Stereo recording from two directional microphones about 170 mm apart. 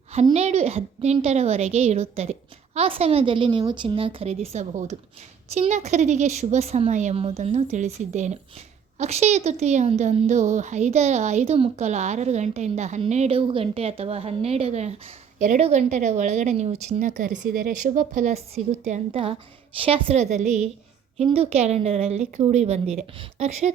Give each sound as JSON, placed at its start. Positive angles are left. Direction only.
{"t": 0.3, "sound": "a woman's voice", "side_deg": -40}